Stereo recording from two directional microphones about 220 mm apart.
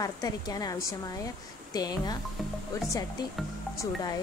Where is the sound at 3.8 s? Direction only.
15° left (ahead or behind).